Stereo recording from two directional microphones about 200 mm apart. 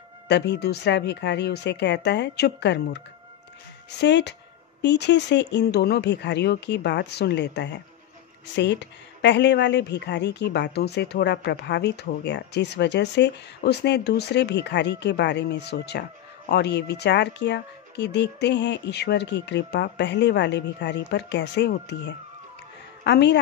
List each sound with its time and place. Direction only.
0.3 s a woman's voice: 55° left (ahead or behind)
4.0 s a woman's voice: 60° left (ahead or behind)